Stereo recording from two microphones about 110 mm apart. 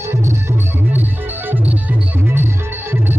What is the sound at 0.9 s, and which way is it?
Music, 15° right (ahead or behind).